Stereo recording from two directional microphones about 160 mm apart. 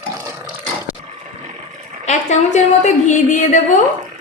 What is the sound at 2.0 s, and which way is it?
A woman's voice, 45° left (ahead or behind).